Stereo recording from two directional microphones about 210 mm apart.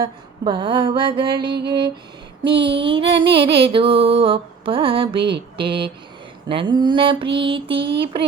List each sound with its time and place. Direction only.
0.0 s music: 25° right (ahead or behind)